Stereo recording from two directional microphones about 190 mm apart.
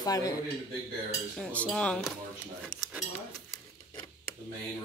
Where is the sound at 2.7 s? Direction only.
Centre (ahead or behind).